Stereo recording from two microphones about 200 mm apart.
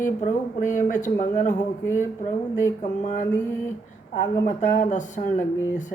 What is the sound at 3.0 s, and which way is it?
Mantra, 40° left (ahead or behind).